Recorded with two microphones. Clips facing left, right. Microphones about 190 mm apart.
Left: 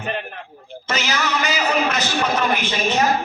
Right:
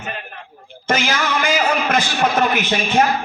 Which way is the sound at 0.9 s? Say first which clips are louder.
Right 4 dB; 50° right (ahead or behind).